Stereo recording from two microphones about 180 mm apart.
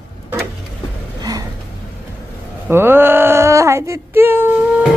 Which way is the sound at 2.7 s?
10° right (ahead or behind).